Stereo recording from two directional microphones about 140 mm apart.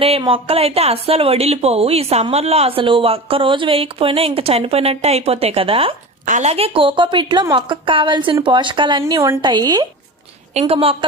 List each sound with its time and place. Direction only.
0.2 s a woman's voice: 40° right (ahead or behind)
6.2 s a woman's voice: 65° right (ahead or behind)
6.5 s a woman's voice: 40° right (ahead or behind)
9.0 s speech: 20° right (ahead or behind)
10.5 s a woman's voice: 45° right (ahead or behind)